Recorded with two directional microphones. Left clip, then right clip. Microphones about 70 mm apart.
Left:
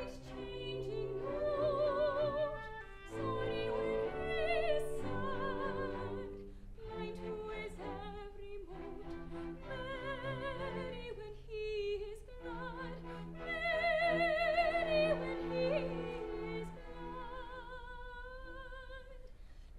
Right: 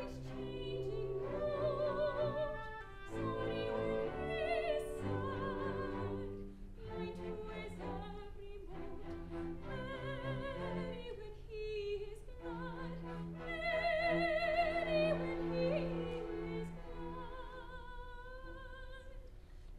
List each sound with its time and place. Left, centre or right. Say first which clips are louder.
0.0 s music: even; left
1.1 s music: left 1 dB; centre
1.5 s music: left 4 dB; left
6.9 s music: left 1 dB; left
7.4 s a capella: left 2 dB; left
9.7 s music: left 6 dB; left